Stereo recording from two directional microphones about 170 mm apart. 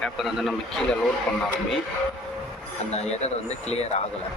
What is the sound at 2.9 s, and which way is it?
Speech, 40° left (ahead or behind).